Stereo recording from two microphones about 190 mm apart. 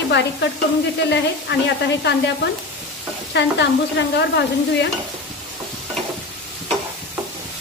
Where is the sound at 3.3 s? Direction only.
65° left (ahead or behind).